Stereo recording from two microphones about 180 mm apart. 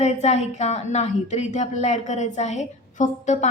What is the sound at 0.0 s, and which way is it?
Speech, 40° left (ahead or behind).